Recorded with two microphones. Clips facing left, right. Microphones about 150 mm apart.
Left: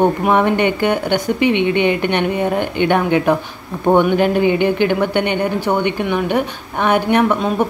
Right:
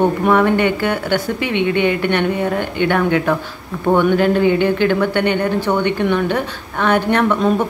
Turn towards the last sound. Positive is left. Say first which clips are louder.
# left 1 dB
turn(degrees=15)  # may be behind; listen again after turning